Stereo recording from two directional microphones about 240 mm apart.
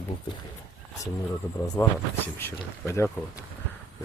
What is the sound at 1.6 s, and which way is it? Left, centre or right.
Speech, centre.